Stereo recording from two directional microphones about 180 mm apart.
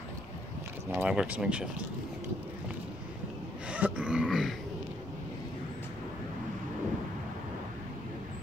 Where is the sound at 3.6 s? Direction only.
5° right (ahead or behind).